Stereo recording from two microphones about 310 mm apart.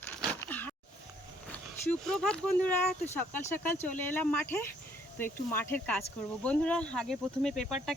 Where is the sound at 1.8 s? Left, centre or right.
Centre.